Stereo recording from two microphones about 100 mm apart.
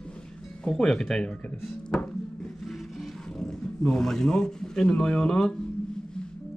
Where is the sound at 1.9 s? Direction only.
5° left (ahead or behind).